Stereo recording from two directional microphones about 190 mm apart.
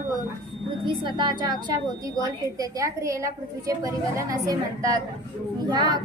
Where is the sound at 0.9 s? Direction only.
25° right (ahead or behind).